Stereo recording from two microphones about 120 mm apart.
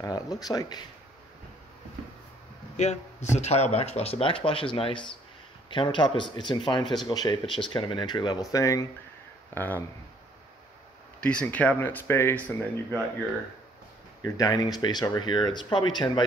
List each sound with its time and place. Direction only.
0.0 s speech: 30° left (ahead or behind)
2.8 s speech: 75° left (ahead or behind); by 8.8 s 30° left (ahead or behind)
9.5 s speech: 15° left (ahead or behind)
11.2 s speech: 10° left (ahead or behind)
14.2 s speech: 30° left (ahead or behind)